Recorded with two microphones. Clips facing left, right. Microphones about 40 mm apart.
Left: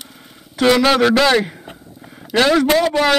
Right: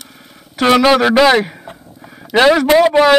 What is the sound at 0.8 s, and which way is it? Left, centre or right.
Speech, centre.